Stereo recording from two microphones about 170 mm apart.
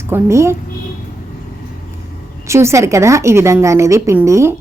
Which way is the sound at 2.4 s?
15° right (ahead or behind).